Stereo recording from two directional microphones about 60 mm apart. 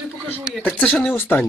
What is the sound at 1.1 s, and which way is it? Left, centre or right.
Speech, left.